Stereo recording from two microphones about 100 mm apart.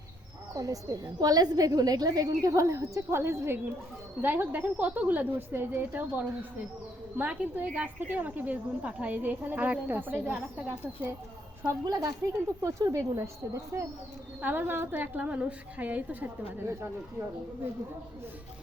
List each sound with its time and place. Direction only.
0.5 s a woman's voice: 35° right (ahead or behind)
11.9 s a woman's voice: 35° right (ahead or behind)
14.4 s a woman's voice: 20° right (ahead or behind)
16.6 s a woman's voice: 25° right (ahead or behind)